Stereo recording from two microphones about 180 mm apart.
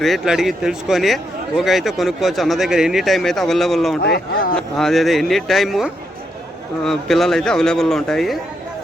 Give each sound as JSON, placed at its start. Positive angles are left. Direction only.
{"t": 0.0, "sound": "a man's voice", "side_deg": 0}
{"t": 4.0, "sound": "speech", "side_deg": 60}
{"t": 4.5, "sound": "a man's voice", "side_deg": 0}